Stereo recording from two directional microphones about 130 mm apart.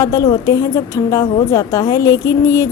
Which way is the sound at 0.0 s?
25° left (ahead or behind).